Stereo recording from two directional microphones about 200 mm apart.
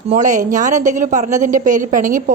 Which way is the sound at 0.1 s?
40° right (ahead or behind).